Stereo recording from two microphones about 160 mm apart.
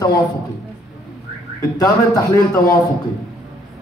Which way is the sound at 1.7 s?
25° left (ahead or behind).